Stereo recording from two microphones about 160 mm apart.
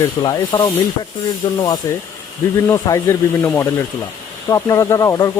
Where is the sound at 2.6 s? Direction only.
15° left (ahead or behind).